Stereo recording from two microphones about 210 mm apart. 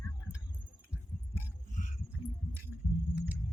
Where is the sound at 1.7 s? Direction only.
35° left (ahead or behind).